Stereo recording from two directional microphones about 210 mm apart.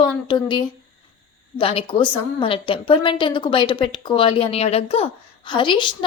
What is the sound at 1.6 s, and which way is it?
A woman's voice, 25° left (ahead or behind).